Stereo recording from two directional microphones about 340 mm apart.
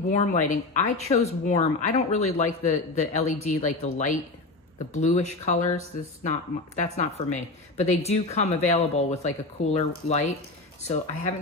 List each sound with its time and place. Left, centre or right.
0.1 s speech: left